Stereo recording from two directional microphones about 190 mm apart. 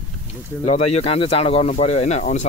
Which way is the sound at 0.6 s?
35° left (ahead or behind).